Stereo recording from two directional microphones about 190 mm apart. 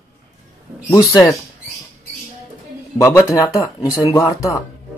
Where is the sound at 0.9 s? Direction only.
20° left (ahead or behind).